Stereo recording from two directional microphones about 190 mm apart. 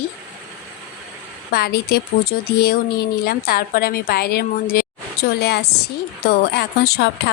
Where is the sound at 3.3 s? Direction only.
55° left (ahead or behind).